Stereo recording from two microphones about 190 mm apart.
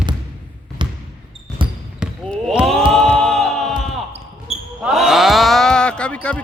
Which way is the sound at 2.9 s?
Centre (ahead or behind).